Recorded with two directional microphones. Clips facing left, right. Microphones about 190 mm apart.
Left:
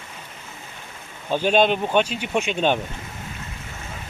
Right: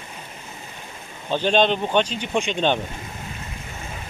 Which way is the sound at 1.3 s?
5° left (ahead or behind).